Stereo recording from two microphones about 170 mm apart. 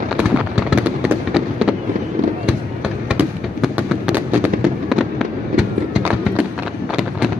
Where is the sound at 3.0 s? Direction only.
5° right (ahead or behind).